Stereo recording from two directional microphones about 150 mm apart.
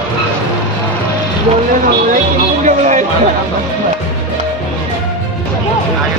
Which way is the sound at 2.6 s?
55° right (ahead or behind).